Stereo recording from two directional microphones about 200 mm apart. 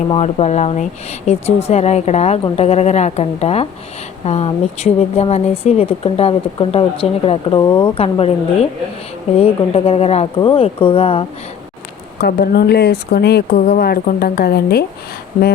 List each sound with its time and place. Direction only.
0.1 s speech: 30° left (ahead or behind)
9.4 s speech: 30° left (ahead or behind)
12.2 s a woman's voice: 50° left (ahead or behind)